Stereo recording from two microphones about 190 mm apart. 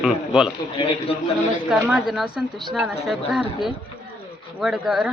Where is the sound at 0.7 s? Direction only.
30° left (ahead or behind).